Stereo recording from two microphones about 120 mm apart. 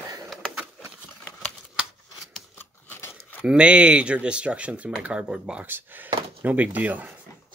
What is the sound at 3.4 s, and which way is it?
Speech, 10° right (ahead or behind).